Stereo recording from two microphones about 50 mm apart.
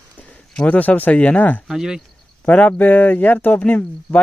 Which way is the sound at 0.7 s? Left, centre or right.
Left.